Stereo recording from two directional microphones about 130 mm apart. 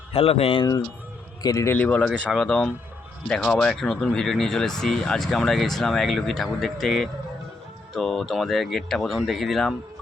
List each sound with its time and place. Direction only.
0.1 s speech: 50° left (ahead or behind)
1.4 s a man's voice: 25° left (ahead or behind)
1.7 s speech: 10° left (ahead or behind)